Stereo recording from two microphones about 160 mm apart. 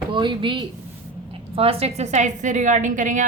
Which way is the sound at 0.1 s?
30° right (ahead or behind).